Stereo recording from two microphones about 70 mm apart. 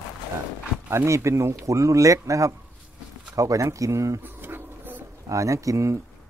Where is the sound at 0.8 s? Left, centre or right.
Right.